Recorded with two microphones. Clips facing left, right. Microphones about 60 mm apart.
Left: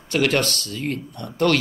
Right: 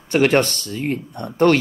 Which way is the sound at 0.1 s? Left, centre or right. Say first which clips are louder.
Right 4 dB; right.